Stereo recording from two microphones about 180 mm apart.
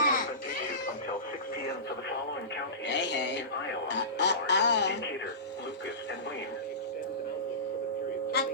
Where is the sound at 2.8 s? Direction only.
75° left (ahead or behind).